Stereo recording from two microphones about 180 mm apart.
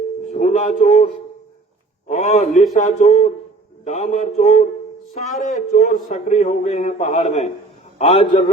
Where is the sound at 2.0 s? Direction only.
40° left (ahead or behind).